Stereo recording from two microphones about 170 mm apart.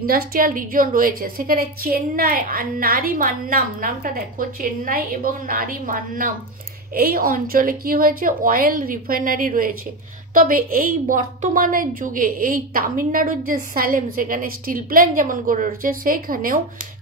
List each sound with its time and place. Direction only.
0.0 s a woman's voice: 60° right (ahead or behind)